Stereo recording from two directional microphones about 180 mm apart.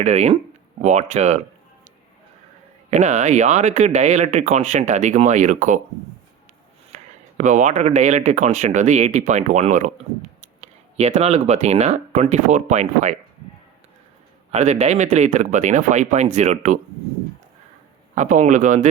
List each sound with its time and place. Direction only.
0.0 s speech: 40° right (ahead or behind)
2.9 s speech: 40° right (ahead or behind)
7.3 s speech: 45° right (ahead or behind)
10.9 s speech: 35° right (ahead or behind)
14.5 s speech: 35° right (ahead or behind)
18.1 s speech: 40° right (ahead or behind)